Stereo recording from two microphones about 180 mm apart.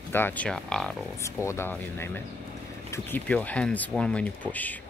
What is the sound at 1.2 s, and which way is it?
Speech, 15° left (ahead or behind).